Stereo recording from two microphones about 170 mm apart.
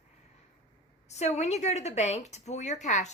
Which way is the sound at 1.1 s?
40° left (ahead or behind).